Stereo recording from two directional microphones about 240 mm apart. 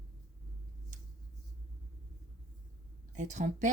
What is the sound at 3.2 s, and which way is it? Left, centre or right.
Speech, right.